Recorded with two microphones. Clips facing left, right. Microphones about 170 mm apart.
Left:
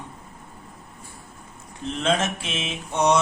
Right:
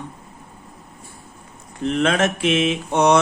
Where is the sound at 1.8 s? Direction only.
70° right (ahead or behind).